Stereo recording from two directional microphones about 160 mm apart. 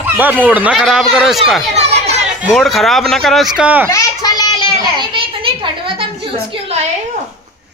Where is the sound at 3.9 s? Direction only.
25° left (ahead or behind).